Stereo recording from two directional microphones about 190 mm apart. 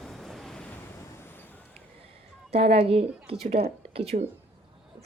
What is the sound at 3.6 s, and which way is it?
Speech, 55° right (ahead or behind).